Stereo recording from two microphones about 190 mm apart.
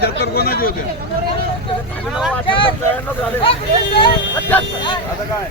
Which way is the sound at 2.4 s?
25° left (ahead or behind).